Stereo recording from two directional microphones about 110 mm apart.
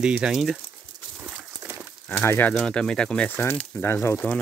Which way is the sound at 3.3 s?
20° left (ahead or behind).